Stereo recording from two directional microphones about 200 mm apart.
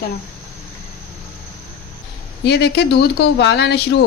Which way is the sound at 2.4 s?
60° left (ahead or behind).